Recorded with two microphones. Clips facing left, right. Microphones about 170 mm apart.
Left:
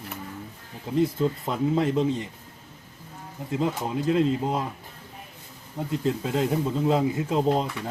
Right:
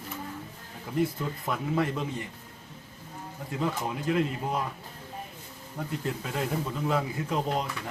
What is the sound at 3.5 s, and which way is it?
Speech, 20° left (ahead or behind).